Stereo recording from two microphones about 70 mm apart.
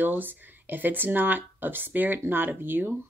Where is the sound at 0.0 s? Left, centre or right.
Right.